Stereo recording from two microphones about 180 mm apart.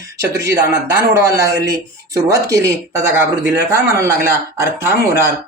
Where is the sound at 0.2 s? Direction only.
15° right (ahead or behind).